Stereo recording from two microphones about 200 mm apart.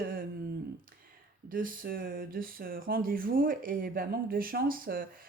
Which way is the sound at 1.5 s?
45° right (ahead or behind).